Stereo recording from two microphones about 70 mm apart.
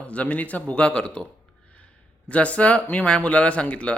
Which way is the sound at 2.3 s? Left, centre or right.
Centre.